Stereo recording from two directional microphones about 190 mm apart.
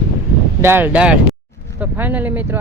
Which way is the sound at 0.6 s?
10° right (ahead or behind).